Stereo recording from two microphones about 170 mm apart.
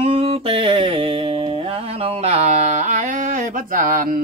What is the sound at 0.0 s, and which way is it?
Music, 35° right (ahead or behind).